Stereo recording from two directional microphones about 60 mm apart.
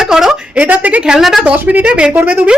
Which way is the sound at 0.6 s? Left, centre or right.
Right.